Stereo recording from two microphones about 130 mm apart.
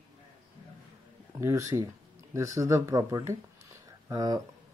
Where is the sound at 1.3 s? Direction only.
25° right (ahead or behind).